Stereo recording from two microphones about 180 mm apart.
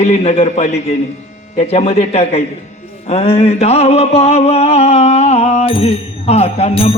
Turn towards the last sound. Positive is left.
turn(degrees=30)  # may be behind; listen again after turning